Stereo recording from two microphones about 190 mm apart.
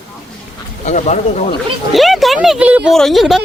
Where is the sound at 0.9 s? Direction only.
40° left (ahead or behind).